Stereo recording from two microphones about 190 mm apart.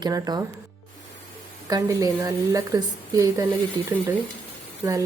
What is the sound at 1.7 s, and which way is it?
A woman's voice, 20° right (ahead or behind).